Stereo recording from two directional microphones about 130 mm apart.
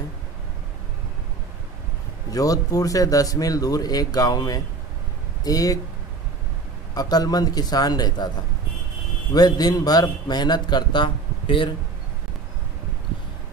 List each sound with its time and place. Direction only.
2.3 s speech: 30° left (ahead or behind)
7.0 s a man's voice: 30° left (ahead or behind)
9.3 s a man's voice: 30° left (ahead or behind)